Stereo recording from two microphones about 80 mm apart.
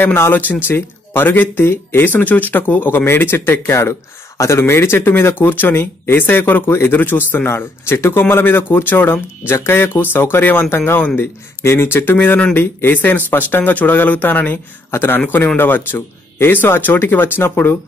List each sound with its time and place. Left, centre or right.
0.0 s speech: left